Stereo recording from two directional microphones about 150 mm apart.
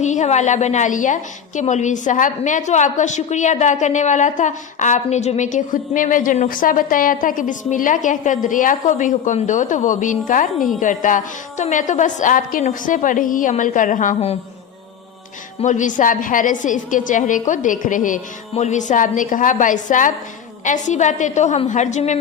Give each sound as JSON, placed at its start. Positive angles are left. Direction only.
{"t": 0.0, "sound": "a woman's voice", "side_deg": 50}
{"t": 15.6, "sound": "a woman's voice", "side_deg": 55}